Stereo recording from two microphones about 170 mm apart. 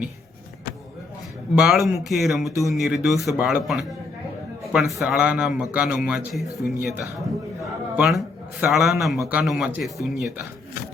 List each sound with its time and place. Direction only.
1.5 s speech: centre (ahead or behind)
7.9 s speech: centre (ahead or behind)